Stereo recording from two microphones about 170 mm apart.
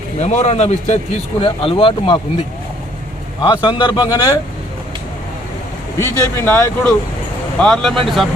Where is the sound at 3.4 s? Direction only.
25° left (ahead or behind).